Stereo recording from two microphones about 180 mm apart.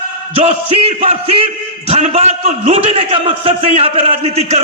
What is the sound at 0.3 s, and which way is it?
A man's voice, 35° right (ahead or behind).